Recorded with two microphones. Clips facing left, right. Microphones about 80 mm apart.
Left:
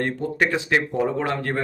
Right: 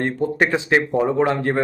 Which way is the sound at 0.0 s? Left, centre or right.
Right.